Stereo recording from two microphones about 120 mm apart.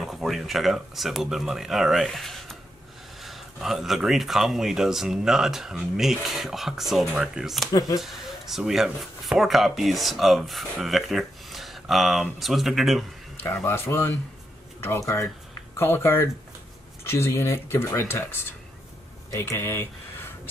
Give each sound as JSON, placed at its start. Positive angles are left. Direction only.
{"t": 0.0, "sound": "speech", "side_deg": 0}
{"t": 13.7, "sound": "speech", "side_deg": 20}